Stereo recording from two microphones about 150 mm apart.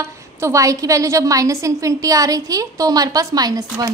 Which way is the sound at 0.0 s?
20° right (ahead or behind).